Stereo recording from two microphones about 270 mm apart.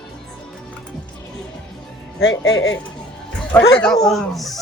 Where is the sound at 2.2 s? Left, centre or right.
Left.